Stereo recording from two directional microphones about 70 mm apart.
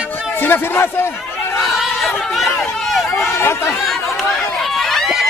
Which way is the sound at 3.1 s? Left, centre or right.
Left.